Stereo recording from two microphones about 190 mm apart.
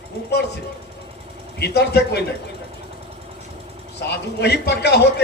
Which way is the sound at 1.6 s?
60° left (ahead or behind).